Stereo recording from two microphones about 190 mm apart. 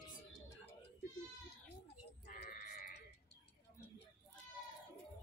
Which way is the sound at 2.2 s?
50° left (ahead or behind).